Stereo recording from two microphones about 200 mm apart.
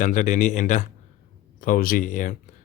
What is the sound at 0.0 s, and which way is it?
A man's voice, 40° left (ahead or behind).